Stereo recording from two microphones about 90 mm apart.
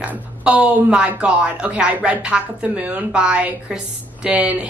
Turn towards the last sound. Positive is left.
turn(degrees=-15)  # may be behind; listen again after turning